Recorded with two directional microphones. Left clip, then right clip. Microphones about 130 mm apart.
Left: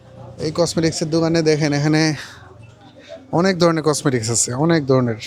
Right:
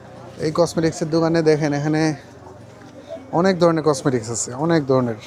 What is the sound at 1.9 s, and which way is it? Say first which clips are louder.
Speech: left 3 dB; 30° left (ahead or behind).